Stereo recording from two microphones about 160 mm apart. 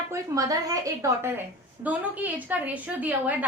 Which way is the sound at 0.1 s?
20° right (ahead or behind).